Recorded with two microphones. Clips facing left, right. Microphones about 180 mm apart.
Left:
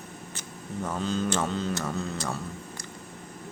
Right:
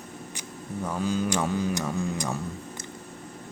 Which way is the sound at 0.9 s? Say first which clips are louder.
Right 1 dB; 10° right (ahead or behind).